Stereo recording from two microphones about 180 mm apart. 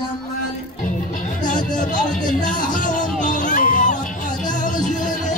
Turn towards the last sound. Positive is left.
turn(degrees=50)  # may be behind; listen again after turning